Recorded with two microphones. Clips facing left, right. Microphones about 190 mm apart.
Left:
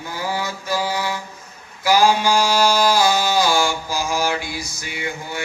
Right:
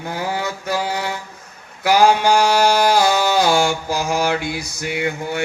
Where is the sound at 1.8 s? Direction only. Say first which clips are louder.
Right 2 dB; 60° right (ahead or behind).